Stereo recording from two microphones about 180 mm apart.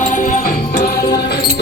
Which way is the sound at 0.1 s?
45° left (ahead or behind).